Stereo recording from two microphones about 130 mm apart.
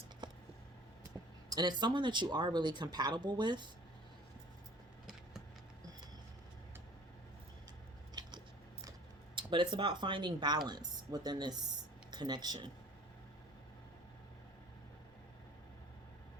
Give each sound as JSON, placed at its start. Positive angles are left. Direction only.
{"t": 1.5, "sound": "speech", "side_deg": -35}
{"t": 9.3, "sound": "speech", "side_deg": -40}